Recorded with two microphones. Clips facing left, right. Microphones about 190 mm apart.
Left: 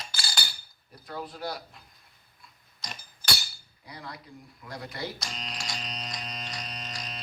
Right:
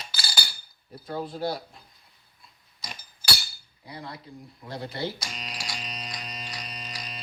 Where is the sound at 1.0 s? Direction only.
30° right (ahead or behind).